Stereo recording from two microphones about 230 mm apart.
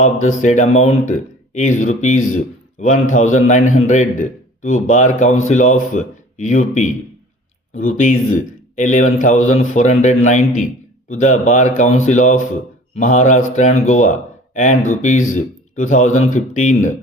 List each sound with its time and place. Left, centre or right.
0.0 s speech: left